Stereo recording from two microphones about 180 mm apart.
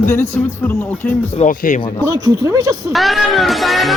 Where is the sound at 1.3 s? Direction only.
45° left (ahead or behind).